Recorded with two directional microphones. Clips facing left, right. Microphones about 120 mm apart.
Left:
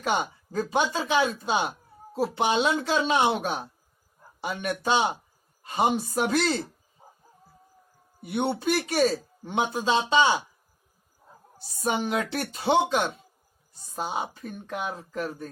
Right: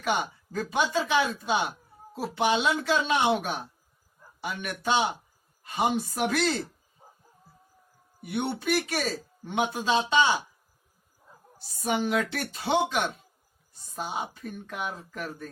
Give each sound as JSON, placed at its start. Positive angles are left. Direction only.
{"t": 0.0, "sound": "a man's voice", "side_deg": 30}
{"t": 8.2, "sound": "speech", "side_deg": 30}
{"t": 11.8, "sound": "speech", "side_deg": 30}
{"t": 14.7, "sound": "speech", "side_deg": 30}